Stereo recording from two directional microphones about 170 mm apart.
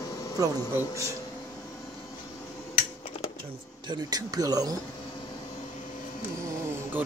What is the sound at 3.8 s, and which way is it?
Speech, 25° right (ahead or behind).